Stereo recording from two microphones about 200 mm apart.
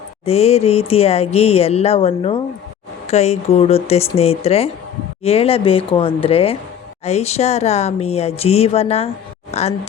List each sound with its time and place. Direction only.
0.3 s a woman's voice: 30° left (ahead or behind)